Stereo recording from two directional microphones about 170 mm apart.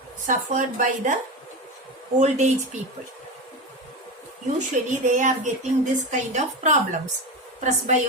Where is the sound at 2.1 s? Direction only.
45° right (ahead or behind).